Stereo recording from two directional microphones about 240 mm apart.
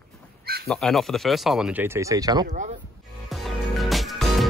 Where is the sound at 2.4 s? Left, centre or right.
Right.